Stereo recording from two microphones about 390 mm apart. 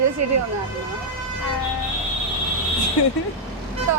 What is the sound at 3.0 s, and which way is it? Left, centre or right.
Speech, left.